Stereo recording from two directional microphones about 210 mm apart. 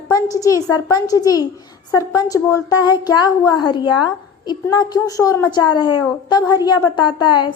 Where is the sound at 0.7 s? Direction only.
20° left (ahead or behind).